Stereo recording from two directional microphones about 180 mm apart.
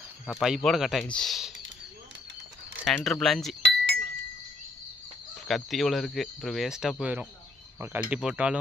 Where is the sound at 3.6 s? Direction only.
75° right (ahead or behind).